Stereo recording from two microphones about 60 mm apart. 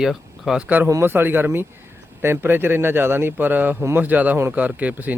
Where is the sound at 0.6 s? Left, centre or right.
Right.